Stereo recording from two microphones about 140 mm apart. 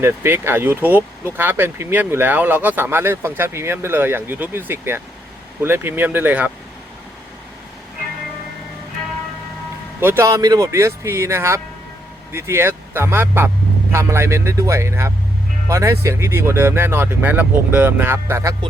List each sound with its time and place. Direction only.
0.0 s speech: 15° right (ahead or behind)
10.0 s speech: 15° right (ahead or behind)